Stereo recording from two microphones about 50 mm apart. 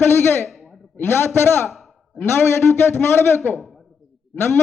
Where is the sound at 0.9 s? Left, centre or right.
Left.